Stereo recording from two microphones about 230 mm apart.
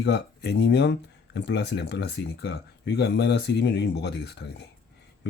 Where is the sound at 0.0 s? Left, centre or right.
Left.